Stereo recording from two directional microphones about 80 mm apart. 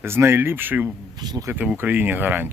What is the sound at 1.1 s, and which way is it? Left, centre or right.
Speech, right.